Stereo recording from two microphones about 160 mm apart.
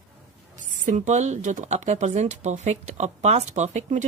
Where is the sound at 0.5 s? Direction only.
50° right (ahead or behind).